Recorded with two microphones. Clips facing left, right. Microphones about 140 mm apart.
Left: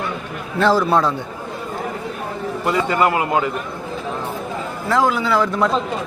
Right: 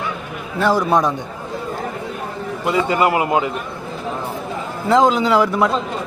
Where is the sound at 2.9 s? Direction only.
15° right (ahead or behind).